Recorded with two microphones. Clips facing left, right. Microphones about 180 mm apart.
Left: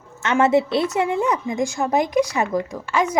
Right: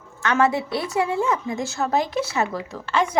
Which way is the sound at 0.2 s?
20° left (ahead or behind).